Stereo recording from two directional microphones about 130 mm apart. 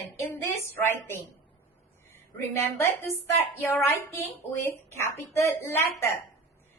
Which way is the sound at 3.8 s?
15° left (ahead or behind).